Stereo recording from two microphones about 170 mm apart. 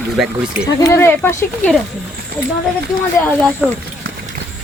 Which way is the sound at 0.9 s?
15° left (ahead or behind).